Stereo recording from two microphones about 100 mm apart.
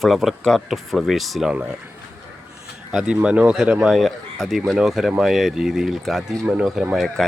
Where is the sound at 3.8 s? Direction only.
Centre (ahead or behind).